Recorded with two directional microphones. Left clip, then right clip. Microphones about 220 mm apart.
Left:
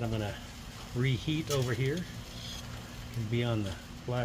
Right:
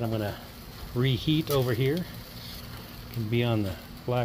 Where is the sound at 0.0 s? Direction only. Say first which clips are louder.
Right 5 dB; 25° right (ahead or behind).